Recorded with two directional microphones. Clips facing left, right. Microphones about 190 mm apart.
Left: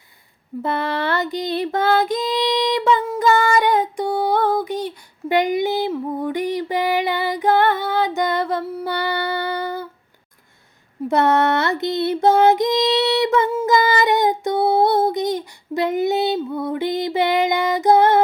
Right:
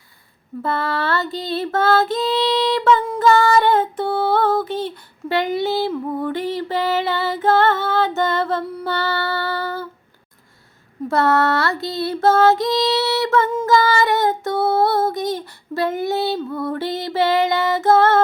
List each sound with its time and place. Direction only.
0.6 s female singing: 20° left (ahead or behind)
11.1 s female singing: 20° left (ahead or behind)
13.7 s child singing: 20° left (ahead or behind)